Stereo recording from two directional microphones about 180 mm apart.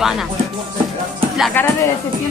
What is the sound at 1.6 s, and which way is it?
Speech, 10° left (ahead or behind).